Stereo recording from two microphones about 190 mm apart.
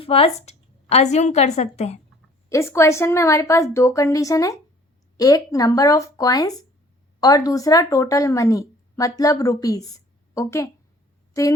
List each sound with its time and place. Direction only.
0.0 s a woman's voice: 30° left (ahead or behind)
2.5 s a woman's voice: 15° left (ahead or behind)